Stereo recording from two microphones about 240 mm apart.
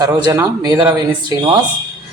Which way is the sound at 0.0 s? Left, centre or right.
Centre.